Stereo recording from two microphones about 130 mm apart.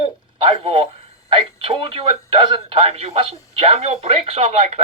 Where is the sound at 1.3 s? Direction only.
45° right (ahead or behind).